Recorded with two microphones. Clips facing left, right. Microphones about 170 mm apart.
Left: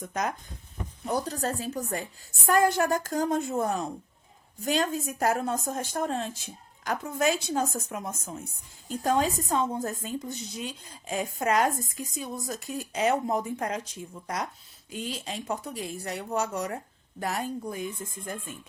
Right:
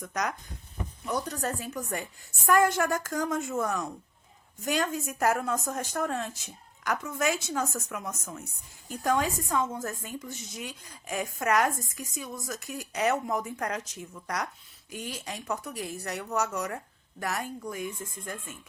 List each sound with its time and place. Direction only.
0.1 s a woman's voice: 25° left (ahead or behind)